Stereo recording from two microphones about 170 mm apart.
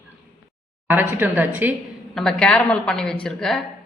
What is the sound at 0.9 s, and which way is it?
Speech, 10° right (ahead or behind).